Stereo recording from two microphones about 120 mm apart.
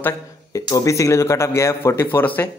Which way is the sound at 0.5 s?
30° left (ahead or behind).